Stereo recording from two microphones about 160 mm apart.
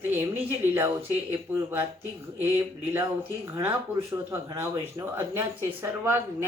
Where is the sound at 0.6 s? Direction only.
15° right (ahead or behind).